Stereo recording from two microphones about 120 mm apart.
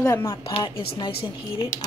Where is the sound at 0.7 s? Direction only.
45° left (ahead or behind).